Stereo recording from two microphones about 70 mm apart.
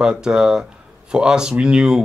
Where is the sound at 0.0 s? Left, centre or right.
Centre.